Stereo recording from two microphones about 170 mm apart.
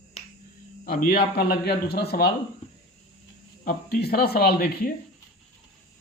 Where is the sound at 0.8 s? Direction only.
60° left (ahead or behind).